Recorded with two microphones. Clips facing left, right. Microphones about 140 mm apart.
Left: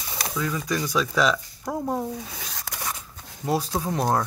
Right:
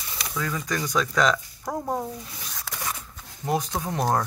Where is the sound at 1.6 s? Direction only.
5° right (ahead or behind).